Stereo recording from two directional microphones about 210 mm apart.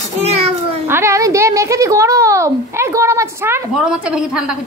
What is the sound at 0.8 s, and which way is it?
A woman's voice, 10° right (ahead or behind).